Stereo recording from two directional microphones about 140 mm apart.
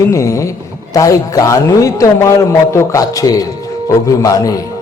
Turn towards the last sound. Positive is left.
turn(degrees=25)  # may be behind; listen again after turning